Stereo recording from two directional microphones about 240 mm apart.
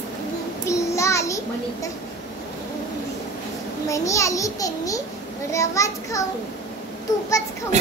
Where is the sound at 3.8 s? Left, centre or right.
Centre.